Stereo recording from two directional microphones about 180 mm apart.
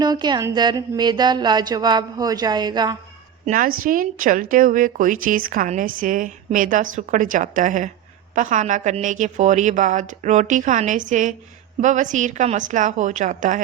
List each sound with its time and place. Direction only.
0.0 s speech: 25° right (ahead or behind)
3.4 s a woman's voice: 45° right (ahead or behind)